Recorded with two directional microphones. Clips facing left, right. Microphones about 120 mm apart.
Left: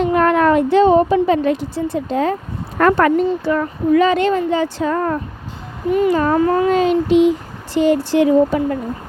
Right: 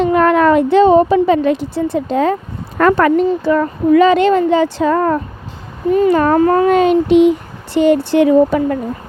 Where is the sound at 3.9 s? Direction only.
90° right.